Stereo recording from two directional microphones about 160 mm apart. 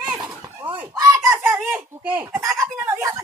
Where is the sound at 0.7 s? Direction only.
10° right (ahead or behind).